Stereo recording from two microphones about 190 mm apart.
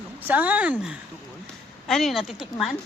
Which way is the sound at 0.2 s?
10° right (ahead or behind).